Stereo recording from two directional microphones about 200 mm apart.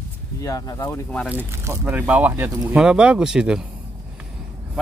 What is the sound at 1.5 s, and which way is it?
Speech, 15° right (ahead or behind).